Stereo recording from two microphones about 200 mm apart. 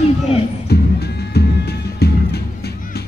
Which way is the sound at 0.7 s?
55° left (ahead or behind).